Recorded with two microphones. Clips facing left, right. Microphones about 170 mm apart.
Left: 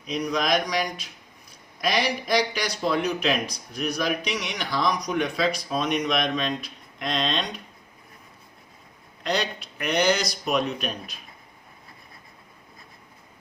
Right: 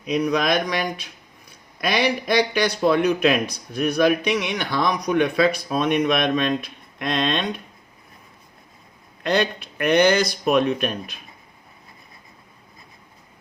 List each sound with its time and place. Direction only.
0.1 s speech: 60° right (ahead or behind)
9.2 s speech: 55° right (ahead or behind)